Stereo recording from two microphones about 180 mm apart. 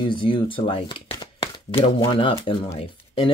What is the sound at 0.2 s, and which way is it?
Speech, 30° left (ahead or behind).